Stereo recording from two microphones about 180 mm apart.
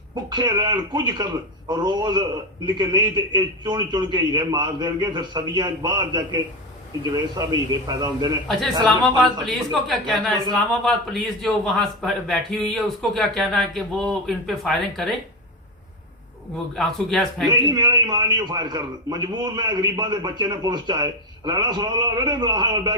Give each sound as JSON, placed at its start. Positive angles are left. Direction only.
{"t": 0.3, "sound": "a man's voice", "side_deg": -25}
{"t": 8.8, "sound": "a man's voice", "side_deg": 0}
{"t": 16.7, "sound": "a man's voice", "side_deg": 0}
{"t": 17.5, "sound": "a man's voice", "side_deg": -25}